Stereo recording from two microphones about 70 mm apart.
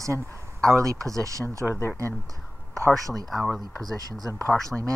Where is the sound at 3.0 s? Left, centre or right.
Right.